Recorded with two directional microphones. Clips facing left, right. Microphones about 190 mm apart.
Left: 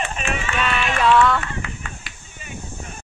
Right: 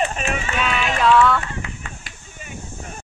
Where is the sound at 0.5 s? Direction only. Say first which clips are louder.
Even; centre (ahead or behind).